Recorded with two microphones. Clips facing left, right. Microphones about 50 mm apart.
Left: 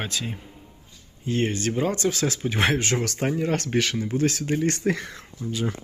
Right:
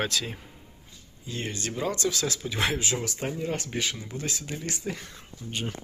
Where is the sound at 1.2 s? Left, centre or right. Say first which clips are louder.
Left 9 dB; left.